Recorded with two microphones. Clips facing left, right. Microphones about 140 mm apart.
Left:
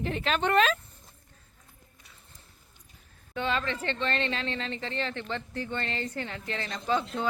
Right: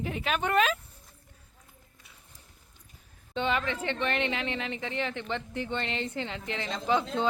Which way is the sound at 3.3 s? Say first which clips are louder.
Right 1 dB; 20° right (ahead or behind).